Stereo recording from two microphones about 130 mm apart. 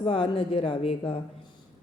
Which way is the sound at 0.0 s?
45° left (ahead or behind).